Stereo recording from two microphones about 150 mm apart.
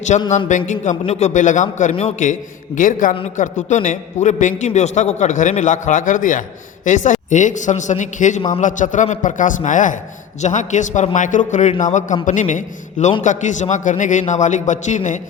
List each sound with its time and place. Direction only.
0.3 s a man's voice: 55° left (ahead or behind)
2.7 s a man's voice: 60° left (ahead or behind)